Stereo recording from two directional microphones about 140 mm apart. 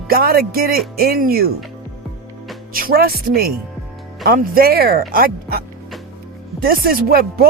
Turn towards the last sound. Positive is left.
turn(degrees=-90)